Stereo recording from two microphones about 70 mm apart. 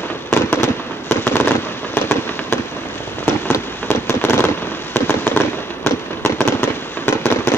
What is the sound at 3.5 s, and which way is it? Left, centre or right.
Rain on surface, left.